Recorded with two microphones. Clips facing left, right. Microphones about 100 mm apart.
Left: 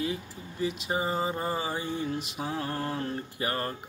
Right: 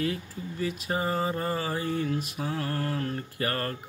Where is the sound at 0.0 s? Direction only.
20° left (ahead or behind).